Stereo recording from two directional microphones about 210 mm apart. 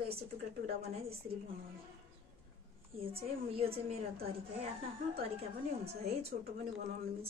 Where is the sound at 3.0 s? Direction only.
25° right (ahead or behind).